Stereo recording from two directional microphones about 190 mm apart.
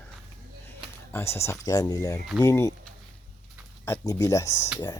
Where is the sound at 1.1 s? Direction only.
15° left (ahead or behind).